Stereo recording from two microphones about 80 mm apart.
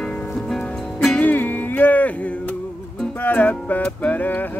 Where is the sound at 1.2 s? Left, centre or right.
Left.